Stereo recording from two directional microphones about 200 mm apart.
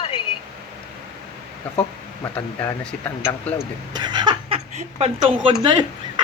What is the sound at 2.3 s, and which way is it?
Speech, 10° left (ahead or behind).